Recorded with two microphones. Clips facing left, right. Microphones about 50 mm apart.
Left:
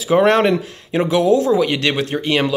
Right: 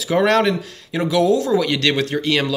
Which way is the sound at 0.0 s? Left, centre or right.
Left.